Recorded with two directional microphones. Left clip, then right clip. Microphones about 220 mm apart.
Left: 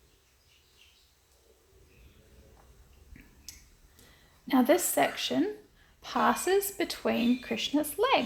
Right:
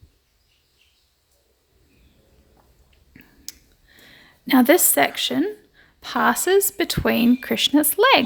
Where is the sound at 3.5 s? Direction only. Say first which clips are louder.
Right 10 dB; 45° right (ahead or behind).